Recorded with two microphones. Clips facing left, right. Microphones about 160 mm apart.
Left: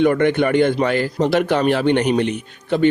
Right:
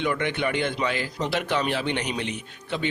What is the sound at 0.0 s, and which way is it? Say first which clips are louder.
A man's voice: left 10 dB; 50° left (ahead or behind).